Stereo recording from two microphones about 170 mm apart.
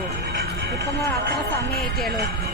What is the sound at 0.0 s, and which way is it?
Music, 70° right (ahead or behind).